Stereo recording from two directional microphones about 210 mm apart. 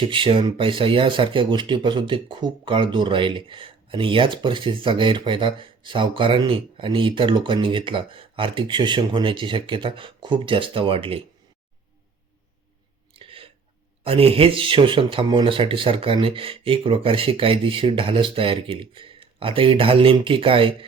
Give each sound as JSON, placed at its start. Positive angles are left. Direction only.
{"t": 0.0, "sound": "speech", "side_deg": -25}
{"t": 13.1, "sound": "a sound", "side_deg": -25}
{"t": 14.0, "sound": "speech", "side_deg": -25}